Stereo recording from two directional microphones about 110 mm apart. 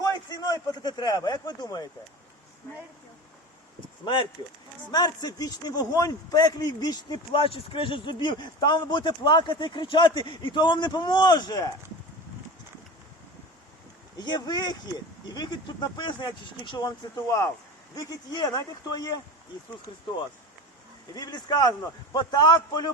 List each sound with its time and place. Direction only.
0.0 s a man's voice: 35° left (ahead or behind)
2.6 s speech: 20° left (ahead or behind)
4.0 s a man's voice: 45° left (ahead or behind)
14.2 s a man's voice: 40° left (ahead or behind)
21.2 s a man's voice: 40° left (ahead or behind)